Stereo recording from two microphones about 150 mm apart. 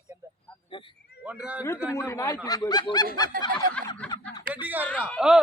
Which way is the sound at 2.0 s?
20° left (ahead or behind).